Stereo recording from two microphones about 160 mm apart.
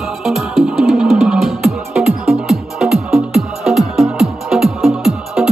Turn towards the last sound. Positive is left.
turn(degrees=0)  # may be behind; listen again after turning